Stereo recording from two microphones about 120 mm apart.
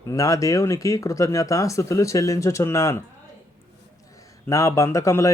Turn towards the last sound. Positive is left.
turn(degrees=25)  # may be behind; listen again after turning